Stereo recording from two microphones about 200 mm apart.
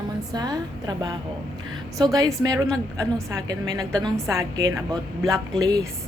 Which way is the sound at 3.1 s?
20° right (ahead or behind).